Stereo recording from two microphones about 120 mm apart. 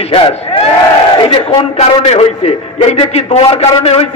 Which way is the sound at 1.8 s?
60° left (ahead or behind).